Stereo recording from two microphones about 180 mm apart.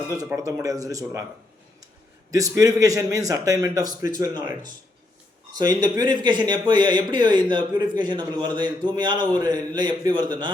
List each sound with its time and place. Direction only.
0.1 s speech: 20° right (ahead or behind)
2.3 s a man's voice: 20° right (ahead or behind)
5.5 s speech: 20° right (ahead or behind)